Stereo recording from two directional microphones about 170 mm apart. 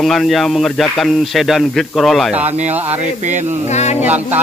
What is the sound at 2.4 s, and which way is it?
Speech, 40° right (ahead or behind).